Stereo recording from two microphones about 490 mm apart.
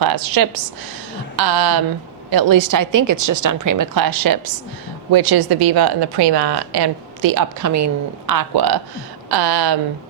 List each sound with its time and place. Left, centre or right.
0.0 s a woman's voice: right